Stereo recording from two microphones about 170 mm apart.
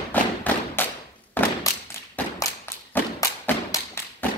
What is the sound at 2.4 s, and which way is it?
Thump, 15° left (ahead or behind).